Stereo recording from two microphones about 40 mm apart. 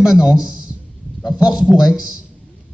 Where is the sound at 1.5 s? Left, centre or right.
Centre.